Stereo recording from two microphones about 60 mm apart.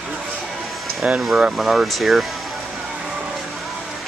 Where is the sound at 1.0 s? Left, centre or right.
Centre.